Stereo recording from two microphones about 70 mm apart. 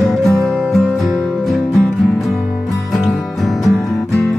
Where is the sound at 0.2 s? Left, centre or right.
Centre.